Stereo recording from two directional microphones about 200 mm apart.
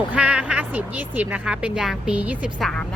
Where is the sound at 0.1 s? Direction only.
5° right (ahead or behind).